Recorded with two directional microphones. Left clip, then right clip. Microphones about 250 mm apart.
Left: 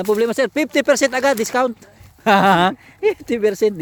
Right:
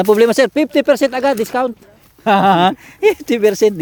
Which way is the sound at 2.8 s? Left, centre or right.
Centre.